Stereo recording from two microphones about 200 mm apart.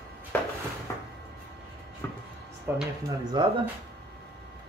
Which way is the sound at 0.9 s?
15° left (ahead or behind).